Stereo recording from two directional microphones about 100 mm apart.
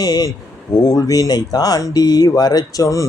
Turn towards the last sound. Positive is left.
turn(degrees=35)  # may be behind; listen again after turning